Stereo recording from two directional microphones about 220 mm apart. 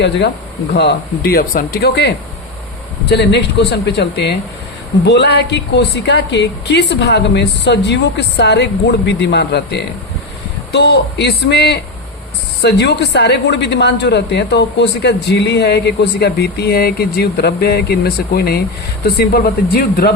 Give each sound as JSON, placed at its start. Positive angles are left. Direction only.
{"t": 0.7, "sound": "a woman's voice", "side_deg": 45}